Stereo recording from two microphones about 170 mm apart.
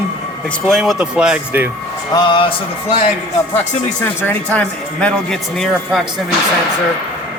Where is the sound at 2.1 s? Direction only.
30° left (ahead or behind).